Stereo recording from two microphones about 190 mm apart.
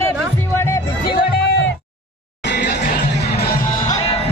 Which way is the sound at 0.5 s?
15° left (ahead or behind).